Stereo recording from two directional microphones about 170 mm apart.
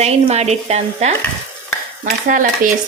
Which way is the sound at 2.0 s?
50° right (ahead or behind).